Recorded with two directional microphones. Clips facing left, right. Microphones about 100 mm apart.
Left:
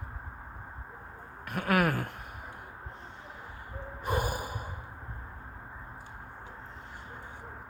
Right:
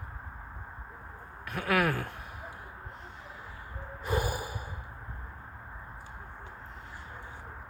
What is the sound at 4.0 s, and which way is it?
Snort, 50° left (ahead or behind).